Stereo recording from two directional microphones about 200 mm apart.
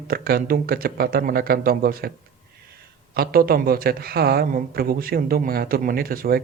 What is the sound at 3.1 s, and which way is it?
Speech, 50° right (ahead or behind).